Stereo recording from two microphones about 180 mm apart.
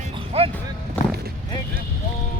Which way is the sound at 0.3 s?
35° right (ahead or behind).